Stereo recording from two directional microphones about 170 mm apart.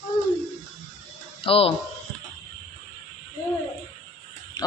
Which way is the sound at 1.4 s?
35° left (ahead or behind).